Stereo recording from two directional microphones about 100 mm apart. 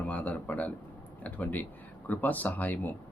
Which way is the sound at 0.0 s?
15° left (ahead or behind).